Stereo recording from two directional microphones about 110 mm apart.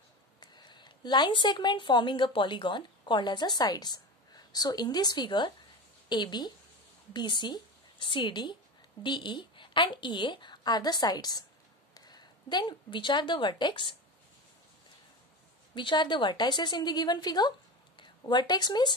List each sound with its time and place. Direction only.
0.4 s a woman's voice: 40° left (ahead or behind)
15.7 s a woman's voice: 45° left (ahead or behind)